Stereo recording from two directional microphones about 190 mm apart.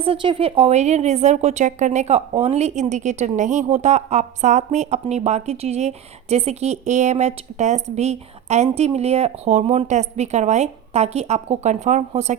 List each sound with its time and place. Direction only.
0.0 s a woman's voice: 25° right (ahead or behind)